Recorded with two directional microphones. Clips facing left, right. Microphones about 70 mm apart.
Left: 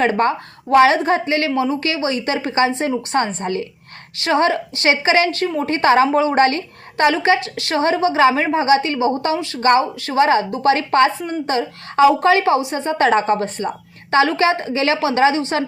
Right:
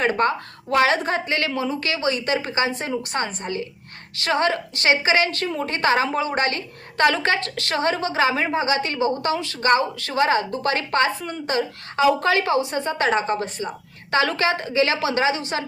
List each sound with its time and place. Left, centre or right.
0.0 s a woman's voice: left
7.0 s a woman's voice: centre; by 14.2 s left
14.2 s a woman's voice: left